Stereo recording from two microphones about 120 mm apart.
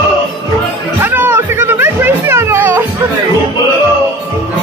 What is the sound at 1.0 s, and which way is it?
Music, 15° right (ahead or behind).